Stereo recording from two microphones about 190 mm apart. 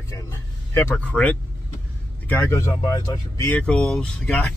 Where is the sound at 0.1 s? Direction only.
15° left (ahead or behind).